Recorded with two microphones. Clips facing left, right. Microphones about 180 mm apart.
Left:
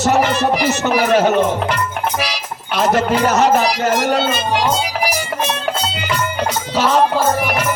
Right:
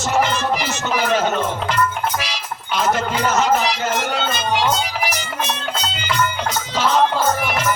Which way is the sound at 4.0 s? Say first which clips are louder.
Left 7 dB; 40° left (ahead or behind).